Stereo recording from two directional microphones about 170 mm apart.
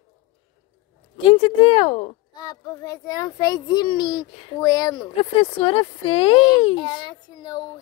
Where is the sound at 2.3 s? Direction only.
20° left (ahead or behind).